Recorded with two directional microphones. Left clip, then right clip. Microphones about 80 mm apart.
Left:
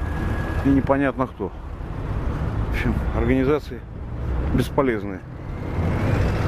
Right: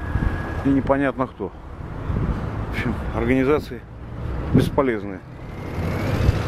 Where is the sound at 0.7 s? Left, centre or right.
Centre.